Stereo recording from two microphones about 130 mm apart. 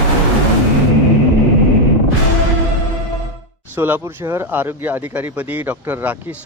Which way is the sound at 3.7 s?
15° right (ahead or behind).